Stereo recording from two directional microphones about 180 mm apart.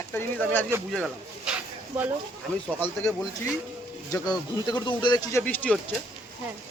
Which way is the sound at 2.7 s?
10° left (ahead or behind).